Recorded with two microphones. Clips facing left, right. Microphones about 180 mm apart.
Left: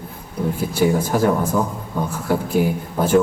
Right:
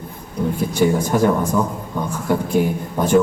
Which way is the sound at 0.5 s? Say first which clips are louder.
Right 1 dB; 5° left (ahead or behind).